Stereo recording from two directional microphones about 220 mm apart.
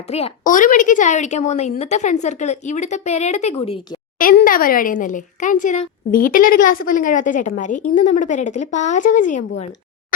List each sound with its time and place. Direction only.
0.1 s a woman's voice: 30° left (ahead or behind)